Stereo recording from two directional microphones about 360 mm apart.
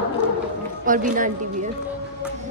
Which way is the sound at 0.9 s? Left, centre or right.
Right.